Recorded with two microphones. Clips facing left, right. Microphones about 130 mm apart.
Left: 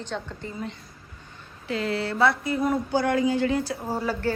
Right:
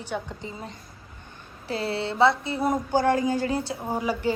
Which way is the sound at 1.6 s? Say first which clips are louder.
Left 1 dB; 30° right (ahead or behind).